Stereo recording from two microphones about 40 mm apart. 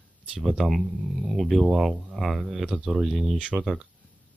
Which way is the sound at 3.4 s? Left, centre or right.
Right.